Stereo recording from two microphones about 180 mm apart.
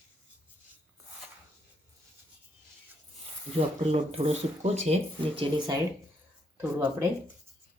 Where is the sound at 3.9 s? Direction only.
35° right (ahead or behind).